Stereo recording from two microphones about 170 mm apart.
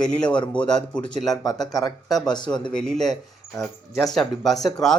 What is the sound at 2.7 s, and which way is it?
Speech, 5° left (ahead or behind).